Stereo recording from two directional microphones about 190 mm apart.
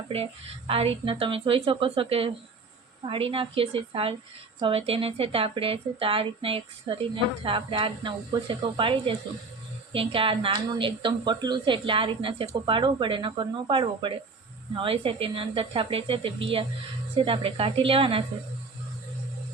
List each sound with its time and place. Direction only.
0.1 s speech: 30° right (ahead or behind)